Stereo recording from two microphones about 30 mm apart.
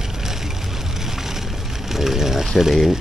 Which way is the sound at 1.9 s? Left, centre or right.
Centre.